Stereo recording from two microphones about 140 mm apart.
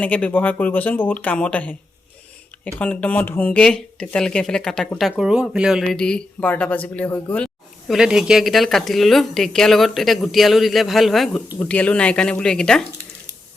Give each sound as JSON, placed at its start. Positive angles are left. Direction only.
{"t": 0.0, "sound": "speech", "side_deg": 10}
{"t": 2.7, "sound": "speech", "side_deg": 10}
{"t": 6.0, "sound": "speech", "side_deg": 5}